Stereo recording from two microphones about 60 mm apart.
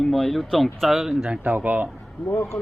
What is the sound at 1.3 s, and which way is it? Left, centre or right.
Speech, right.